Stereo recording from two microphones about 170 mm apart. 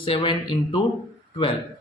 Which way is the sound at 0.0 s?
30° left (ahead or behind).